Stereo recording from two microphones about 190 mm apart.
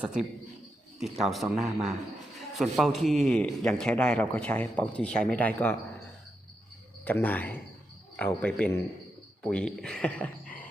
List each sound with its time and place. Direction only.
0.0 s a man's voice: 5° right (ahead or behind)
7.0 s a man's voice: 10° left (ahead or behind)